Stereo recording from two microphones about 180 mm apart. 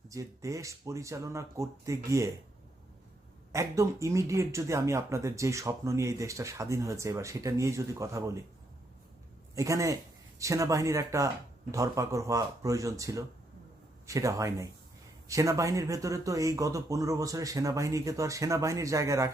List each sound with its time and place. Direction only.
0.1 s speech: 15° right (ahead or behind)
3.5 s speech: 15° right (ahead or behind)
9.6 s speech: 20° right (ahead or behind)